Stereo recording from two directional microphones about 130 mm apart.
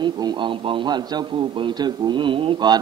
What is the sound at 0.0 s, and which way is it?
A man's voice, 35° right (ahead or behind).